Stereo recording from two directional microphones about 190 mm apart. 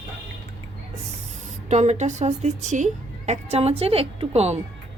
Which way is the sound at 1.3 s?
40° right (ahead or behind).